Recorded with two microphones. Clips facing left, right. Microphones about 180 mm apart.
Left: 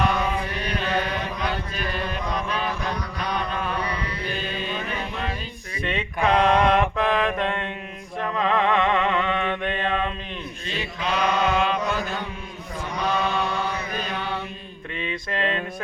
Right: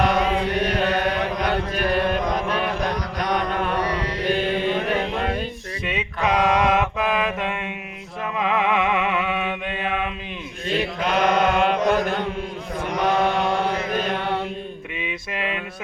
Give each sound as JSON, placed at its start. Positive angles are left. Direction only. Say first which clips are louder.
{"t": 0.1, "sound": "chant", "louder": "right 5 dB", "side_deg": -85}
{"t": 0.9, "sound": "chant", "louder": "right 4 dB", "side_deg": -65}
{"t": 3.9, "sound": "music", "louder": "right 7 dB", "side_deg": -85}
{"t": 5.8, "sound": "a sound", "louder": "left 1 dB", "side_deg": -5}
{"t": 6.3, "sound": "mantra", "louder": "even", "side_deg": -5}
{"t": 8.2, "sound": "music", "louder": "even", "side_deg": -10}
{"t": 10.8, "sound": "mantra", "louder": "right 4 dB", "side_deg": -55}
{"t": 14.9, "sound": "a sound", "louder": "left 3 dB", "side_deg": -10}